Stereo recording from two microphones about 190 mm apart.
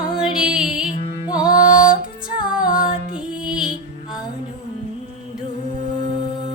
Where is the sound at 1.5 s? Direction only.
45° left (ahead or behind).